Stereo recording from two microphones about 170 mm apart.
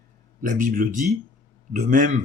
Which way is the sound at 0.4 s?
50° right (ahead or behind).